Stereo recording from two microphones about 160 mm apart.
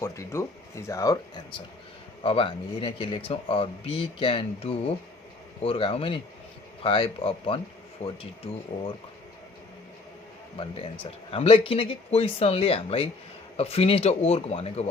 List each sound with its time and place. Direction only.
0.0 s speech: 15° left (ahead or behind)
2.2 s speech: 35° left (ahead or behind)
11.0 s speech: 35° left (ahead or behind)